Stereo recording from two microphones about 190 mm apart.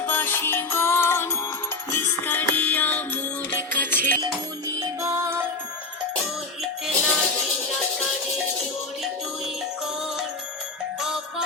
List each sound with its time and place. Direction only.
0.1 s music: 10° left (ahead or behind)
4.2 s music: 20° right (ahead or behind)
6.6 s music: centre (ahead or behind)